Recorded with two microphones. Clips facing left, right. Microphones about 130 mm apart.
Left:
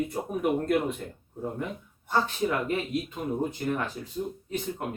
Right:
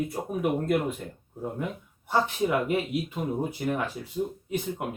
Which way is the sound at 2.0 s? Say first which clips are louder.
Right 1 dB; 15° right (ahead or behind).